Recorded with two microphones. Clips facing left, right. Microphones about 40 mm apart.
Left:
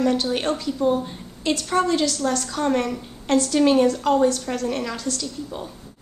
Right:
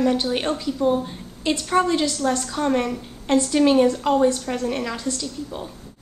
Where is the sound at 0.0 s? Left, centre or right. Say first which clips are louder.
Even; centre.